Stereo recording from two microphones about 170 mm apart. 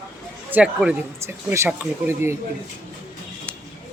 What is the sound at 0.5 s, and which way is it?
Speech, 5° right (ahead or behind).